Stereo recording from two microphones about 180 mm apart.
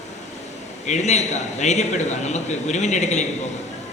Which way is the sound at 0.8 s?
40° left (ahead or behind).